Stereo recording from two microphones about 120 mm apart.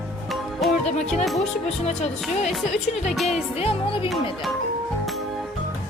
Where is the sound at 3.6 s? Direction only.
55° left (ahead or behind).